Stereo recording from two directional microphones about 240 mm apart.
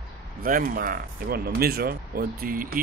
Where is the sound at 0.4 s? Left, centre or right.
Right.